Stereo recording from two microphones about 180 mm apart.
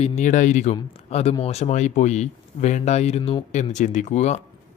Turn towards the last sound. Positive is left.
turn(degrees=40)  # may be behind; listen again after turning